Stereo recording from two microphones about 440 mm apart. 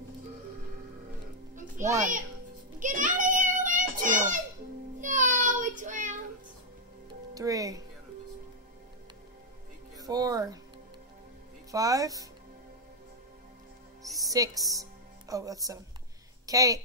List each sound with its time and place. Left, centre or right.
1.5 s music: centre
2.8 s child singing: centre
7.3 s speech: centre
9.9 s speech: centre
11.7 s speech: centre
14.0 s music: centre
16.4 s a woman's voice: centre